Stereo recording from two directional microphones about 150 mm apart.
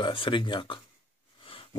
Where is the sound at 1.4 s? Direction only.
35° left (ahead or behind).